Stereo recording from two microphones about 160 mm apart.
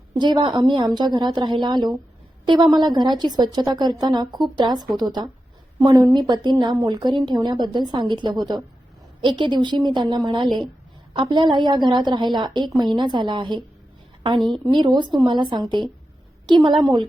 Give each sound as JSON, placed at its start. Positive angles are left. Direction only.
{"t": 0.1, "sound": "a woman's voice", "side_deg": -30}